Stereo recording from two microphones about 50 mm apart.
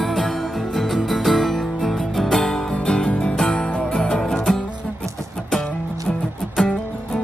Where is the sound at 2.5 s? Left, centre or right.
Centre.